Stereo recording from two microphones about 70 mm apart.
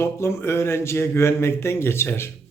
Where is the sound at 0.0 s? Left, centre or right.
Left.